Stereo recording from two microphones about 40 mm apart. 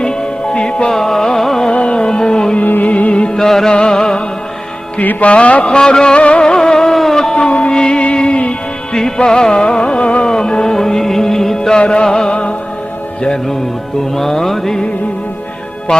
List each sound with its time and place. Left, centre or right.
0.0 s music: left
0.9 s music: centre
1.7 s music: left
2.8 s music: left
3.3 s music: centre
4.9 s music: left
5.7 s music: centre
9.0 s music: centre
14.2 s music: centre
15.9 s music: left